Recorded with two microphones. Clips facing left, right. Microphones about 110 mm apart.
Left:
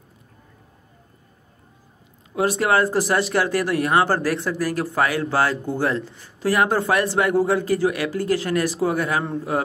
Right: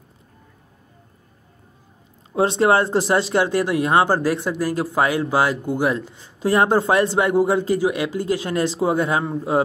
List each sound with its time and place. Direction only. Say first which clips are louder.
2.3 s speech: right 3 dB; 25° right (ahead or behind)